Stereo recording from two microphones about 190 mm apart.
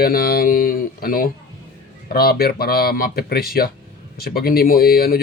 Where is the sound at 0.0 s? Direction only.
50° left (ahead or behind).